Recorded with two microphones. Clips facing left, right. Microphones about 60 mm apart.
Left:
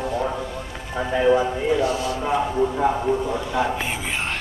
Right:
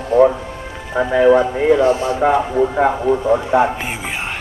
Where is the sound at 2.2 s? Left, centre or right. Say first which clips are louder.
Right 5 dB; right.